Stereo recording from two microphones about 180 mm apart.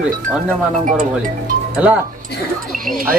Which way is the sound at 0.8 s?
50° right (ahead or behind).